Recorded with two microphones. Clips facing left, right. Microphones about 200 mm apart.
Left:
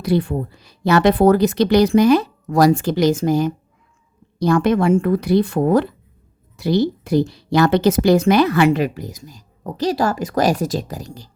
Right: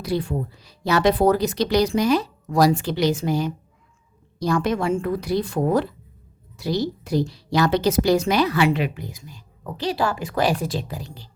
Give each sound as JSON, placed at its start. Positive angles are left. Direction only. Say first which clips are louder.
{"t": 0.0, "sound": "speech", "louder": "left 5 dB", "side_deg": 60}
{"t": 4.4, "sound": "a woman's voice", "louder": "left 6 dB", "side_deg": 55}